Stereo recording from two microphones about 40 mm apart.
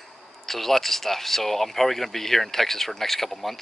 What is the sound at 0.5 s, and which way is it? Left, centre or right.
Speech, centre.